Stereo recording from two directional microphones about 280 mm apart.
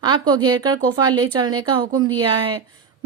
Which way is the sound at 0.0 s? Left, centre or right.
Centre.